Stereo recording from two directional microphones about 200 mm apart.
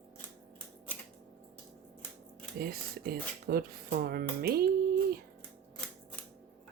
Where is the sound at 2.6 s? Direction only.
50° right (ahead or behind).